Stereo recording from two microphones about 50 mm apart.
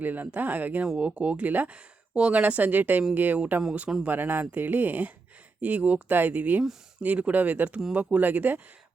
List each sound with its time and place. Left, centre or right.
0.0 s speech: right
0.9 s speech: right